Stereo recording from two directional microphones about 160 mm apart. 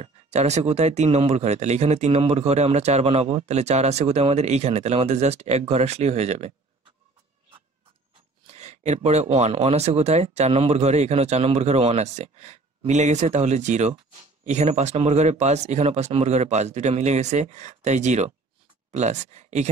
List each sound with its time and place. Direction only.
0.0 s speech: 45° right (ahead or behind)
8.5 s speech: 45° right (ahead or behind)